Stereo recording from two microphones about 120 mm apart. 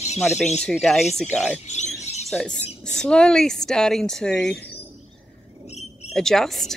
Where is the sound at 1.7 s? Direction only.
70° left (ahead or behind).